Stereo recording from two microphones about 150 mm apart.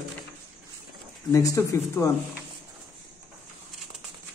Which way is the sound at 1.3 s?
20° left (ahead or behind).